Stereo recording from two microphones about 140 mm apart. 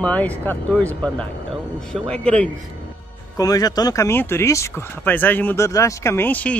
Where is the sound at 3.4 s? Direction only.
25° left (ahead or behind).